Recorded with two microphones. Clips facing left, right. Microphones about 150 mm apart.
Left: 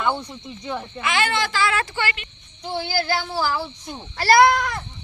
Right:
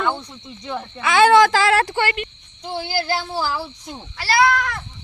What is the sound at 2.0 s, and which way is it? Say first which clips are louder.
Speech: right 5 dB; 55° right (ahead or behind).